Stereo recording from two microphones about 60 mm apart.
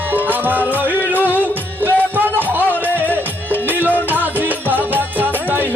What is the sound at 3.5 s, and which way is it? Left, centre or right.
Music, right.